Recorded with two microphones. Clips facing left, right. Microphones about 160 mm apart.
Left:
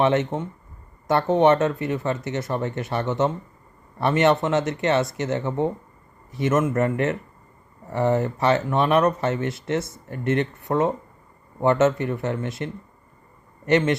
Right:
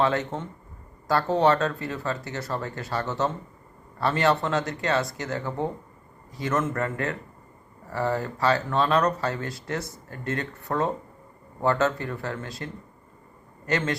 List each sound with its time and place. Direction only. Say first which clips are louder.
0.0 s speech: left 4 dB; 20° left (ahead or behind)